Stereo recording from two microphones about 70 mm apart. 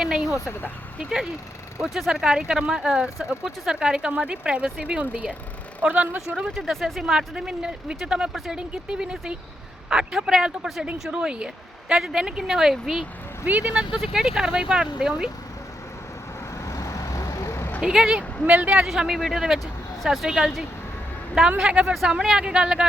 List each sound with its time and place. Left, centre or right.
0.0 s a sound: centre
1.8 s speech: centre; by 6.1 s right
6.1 s speech: centre
13.4 s speech: centre
16.6 s vehicle: left
17.7 s speech: centre
18.4 s speech: centre
18.9 s speech: centre
21.6 s speech: centre